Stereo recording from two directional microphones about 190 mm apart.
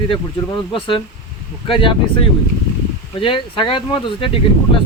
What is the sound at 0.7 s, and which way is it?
Speech, 25° left (ahead or behind).